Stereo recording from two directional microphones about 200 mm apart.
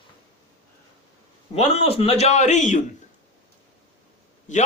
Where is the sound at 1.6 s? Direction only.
30° left (ahead or behind).